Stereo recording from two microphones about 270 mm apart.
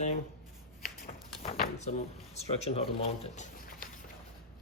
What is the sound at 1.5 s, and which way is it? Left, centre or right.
Speech, left.